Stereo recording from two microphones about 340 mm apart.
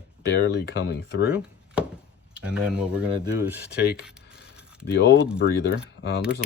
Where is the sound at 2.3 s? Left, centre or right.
Centre.